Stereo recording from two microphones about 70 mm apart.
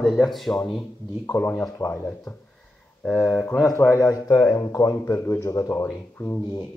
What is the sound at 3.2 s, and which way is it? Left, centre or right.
Speech, left.